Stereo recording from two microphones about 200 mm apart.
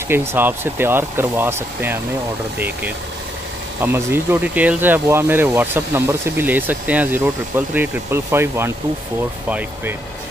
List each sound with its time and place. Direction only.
0.1 s speech: 10° right (ahead or behind)
3.8 s speech: 10° right (ahead or behind)